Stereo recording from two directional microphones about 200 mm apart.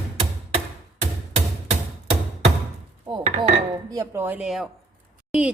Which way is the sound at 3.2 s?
35° right (ahead or behind).